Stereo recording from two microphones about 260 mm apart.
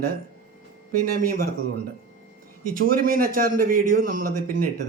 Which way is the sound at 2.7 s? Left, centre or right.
Right.